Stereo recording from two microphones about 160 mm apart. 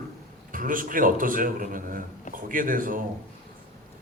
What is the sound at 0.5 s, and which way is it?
A man's voice, 60° right (ahead or behind).